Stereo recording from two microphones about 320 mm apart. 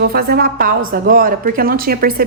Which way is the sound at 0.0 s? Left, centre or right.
Right.